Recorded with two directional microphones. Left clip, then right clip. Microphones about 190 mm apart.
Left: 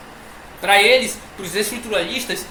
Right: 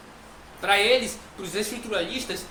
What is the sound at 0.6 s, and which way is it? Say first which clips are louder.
Speech: left 7 dB; 20° right (ahead or behind).